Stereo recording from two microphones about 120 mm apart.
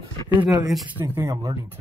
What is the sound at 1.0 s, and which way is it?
Speech, 20° right (ahead or behind).